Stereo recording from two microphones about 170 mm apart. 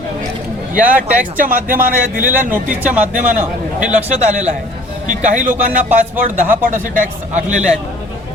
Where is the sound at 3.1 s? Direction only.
50° right (ahead or behind).